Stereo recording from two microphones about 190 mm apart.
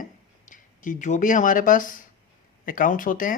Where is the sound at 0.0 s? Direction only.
45° left (ahead or behind).